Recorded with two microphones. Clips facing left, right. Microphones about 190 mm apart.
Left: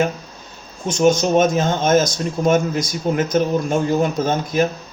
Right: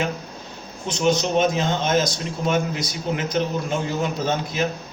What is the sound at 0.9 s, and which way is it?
Speech, 45° left (ahead or behind).